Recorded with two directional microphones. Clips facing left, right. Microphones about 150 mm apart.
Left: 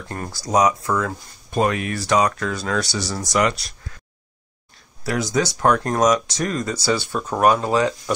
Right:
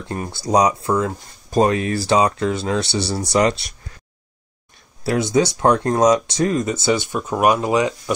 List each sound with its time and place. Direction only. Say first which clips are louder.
0.1 s speech: right 3 dB; 20° right (ahead or behind)
5.0 s speech: right 4 dB; 25° right (ahead or behind)